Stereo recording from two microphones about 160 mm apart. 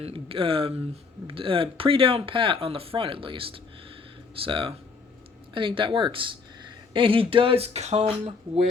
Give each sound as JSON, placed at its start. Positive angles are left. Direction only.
{"t": 0.0, "sound": "speech", "side_deg": -35}